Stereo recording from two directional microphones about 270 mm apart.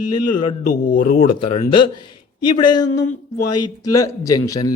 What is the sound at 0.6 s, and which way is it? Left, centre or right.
Speech, left.